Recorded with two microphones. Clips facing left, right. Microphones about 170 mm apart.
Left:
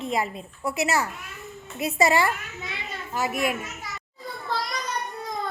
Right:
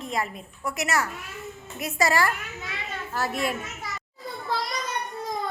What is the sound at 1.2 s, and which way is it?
Children playing, centre (ahead or behind).